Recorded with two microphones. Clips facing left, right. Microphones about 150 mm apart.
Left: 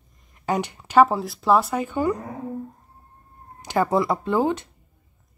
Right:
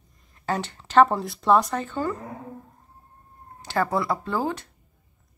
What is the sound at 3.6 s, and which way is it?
Speech, 15° left (ahead or behind).